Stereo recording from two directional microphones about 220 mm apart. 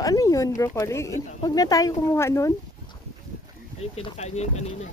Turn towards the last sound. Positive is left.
turn(degrees=30)  # may be behind; listen again after turning